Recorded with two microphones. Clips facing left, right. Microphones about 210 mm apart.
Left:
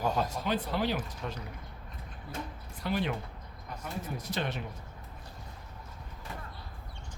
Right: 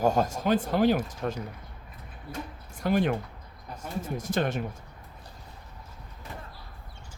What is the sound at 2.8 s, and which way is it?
Speech, 50° right (ahead or behind).